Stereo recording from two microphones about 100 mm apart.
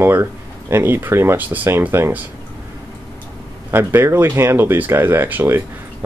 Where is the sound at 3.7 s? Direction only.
25° right (ahead or behind).